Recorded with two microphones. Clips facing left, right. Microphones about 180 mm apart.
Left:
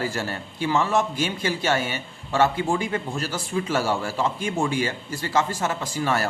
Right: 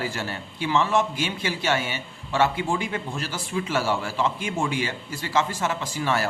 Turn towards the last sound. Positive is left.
turn(degrees=45)  # may be behind; listen again after turning